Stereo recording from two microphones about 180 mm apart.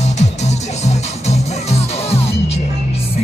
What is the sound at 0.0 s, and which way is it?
Music, 40° left (ahead or behind).